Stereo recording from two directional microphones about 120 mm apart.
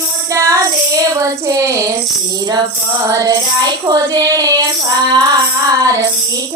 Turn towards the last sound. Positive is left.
turn(degrees=-30)  # may be behind; listen again after turning